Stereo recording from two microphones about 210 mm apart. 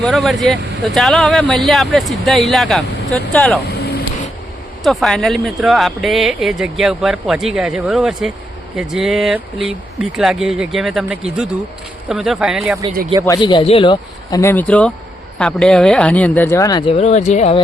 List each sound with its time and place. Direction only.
0.0 s speech: centre (ahead or behind)
3.7 s vehicle: 50° left (ahead or behind)
4.8 s speech: centre (ahead or behind)
13.2 s speech: 20° left (ahead or behind)